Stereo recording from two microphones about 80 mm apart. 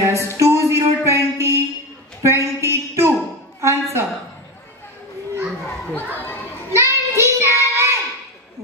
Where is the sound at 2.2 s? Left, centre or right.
Right.